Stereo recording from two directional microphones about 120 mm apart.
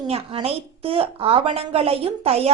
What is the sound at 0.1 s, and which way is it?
A woman's voice, 55° right (ahead or behind).